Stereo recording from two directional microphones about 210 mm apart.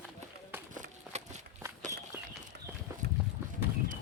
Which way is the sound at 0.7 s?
35° right (ahead or behind).